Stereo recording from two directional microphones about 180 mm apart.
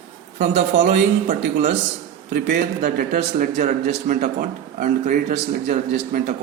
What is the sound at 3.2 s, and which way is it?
Speech, 45° right (ahead or behind).